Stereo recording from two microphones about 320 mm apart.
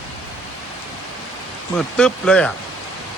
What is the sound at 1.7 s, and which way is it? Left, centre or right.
Speech, centre.